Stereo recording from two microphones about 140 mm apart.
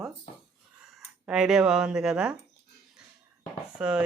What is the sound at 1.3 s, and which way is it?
Speech, 5° right (ahead or behind).